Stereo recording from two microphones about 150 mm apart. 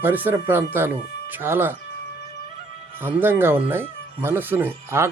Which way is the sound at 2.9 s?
10° right (ahead or behind).